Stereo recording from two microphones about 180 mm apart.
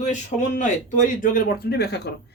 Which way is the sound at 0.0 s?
40° left (ahead or behind).